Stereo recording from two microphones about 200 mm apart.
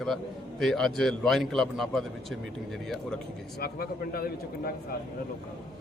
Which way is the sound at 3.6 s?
50° left (ahead or behind).